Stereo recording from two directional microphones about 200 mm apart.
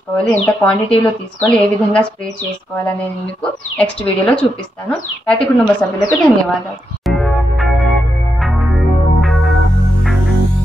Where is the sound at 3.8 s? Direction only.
5° left (ahead or behind).